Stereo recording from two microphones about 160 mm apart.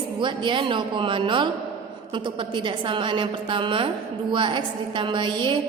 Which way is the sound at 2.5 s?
30° right (ahead or behind).